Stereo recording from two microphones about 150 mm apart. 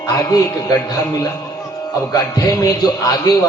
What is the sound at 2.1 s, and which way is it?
A man's voice, 25° left (ahead or behind).